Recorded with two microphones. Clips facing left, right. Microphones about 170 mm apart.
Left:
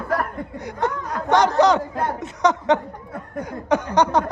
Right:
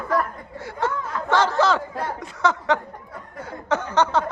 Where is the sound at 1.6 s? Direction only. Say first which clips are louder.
Left 4 dB; 20° left (ahead or behind).